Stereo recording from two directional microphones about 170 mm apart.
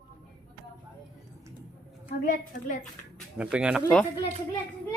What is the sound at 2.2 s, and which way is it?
Speech, 50° left (ahead or behind).